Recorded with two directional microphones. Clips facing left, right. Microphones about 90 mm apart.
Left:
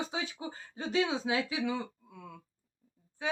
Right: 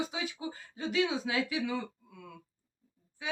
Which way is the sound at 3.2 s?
35° left (ahead or behind).